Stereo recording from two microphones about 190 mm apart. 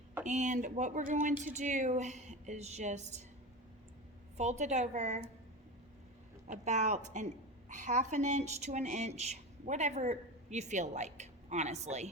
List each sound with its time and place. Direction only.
0.3 s a woman's voice: 40° right (ahead or behind)
4.4 s a woman's voice: 35° right (ahead or behind)
6.5 s a woman's voice: 40° right (ahead or behind)